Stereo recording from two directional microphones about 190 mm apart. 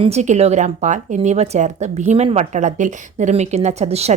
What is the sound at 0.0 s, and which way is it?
A woman's voice, 35° right (ahead or behind).